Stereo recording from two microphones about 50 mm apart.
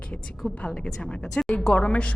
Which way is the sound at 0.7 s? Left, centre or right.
Centre.